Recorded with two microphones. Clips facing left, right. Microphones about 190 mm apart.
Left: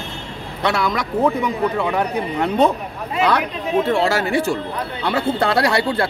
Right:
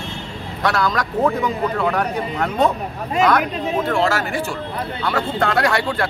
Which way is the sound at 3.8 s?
30° left (ahead or behind).